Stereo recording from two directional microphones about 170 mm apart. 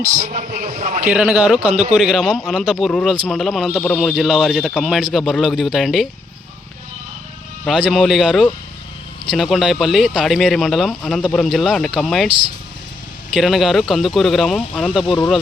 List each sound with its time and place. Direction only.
0.1 s a man's voice: 50° right (ahead or behind)
1.1 s a man's voice: 5° right (ahead or behind)
1.7 s a man's voice: 40° right (ahead or behind)
2.0 s speech: centre (ahead or behind)
7.6 s speech: centre (ahead or behind)
13.3 s speech: centre (ahead or behind)